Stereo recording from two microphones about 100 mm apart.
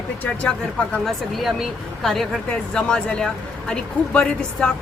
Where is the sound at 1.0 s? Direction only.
Centre (ahead or behind).